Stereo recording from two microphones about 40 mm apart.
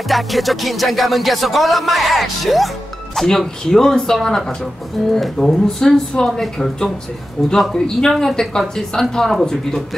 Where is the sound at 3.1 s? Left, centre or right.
Centre.